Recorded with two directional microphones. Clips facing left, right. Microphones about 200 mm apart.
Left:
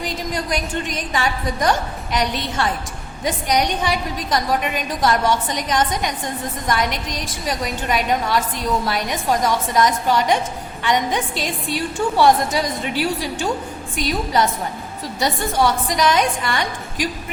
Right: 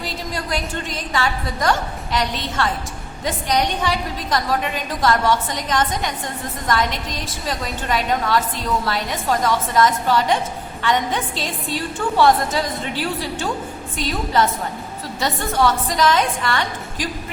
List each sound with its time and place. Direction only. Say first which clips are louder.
0.0 s a woman's voice: left 3 dB; 15° left (ahead or behind)